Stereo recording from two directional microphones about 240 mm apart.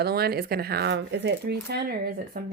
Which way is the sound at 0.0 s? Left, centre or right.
Right.